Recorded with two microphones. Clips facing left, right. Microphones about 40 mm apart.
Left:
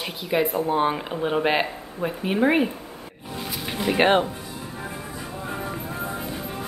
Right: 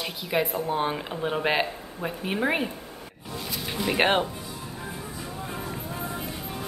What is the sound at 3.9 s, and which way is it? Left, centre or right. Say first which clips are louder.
Speech: left 4 dB; centre.